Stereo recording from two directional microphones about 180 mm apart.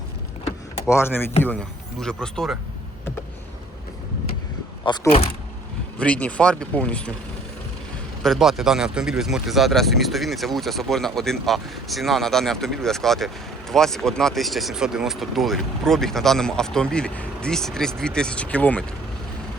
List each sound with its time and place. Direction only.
0.9 s speech: 15° left (ahead or behind)
4.9 s speech: 30° left (ahead or behind)
6.0 s speech: 5° left (ahead or behind)
8.2 s speech: centre (ahead or behind)